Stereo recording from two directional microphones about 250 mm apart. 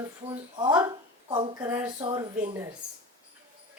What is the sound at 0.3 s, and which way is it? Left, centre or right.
A woman's voice, centre.